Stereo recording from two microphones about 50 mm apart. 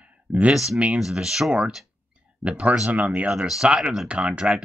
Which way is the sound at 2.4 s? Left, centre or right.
Right.